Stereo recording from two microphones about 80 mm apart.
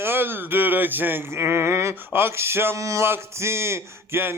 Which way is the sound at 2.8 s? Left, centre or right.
Right.